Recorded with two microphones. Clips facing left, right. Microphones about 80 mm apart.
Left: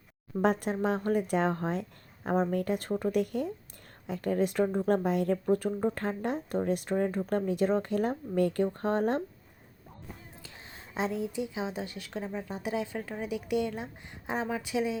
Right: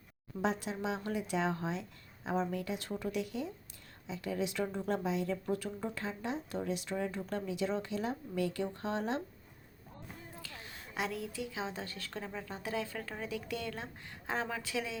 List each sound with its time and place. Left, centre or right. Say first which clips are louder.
0.3 s speech: left 7 dB; left
10.4 s a woman's voice: even; left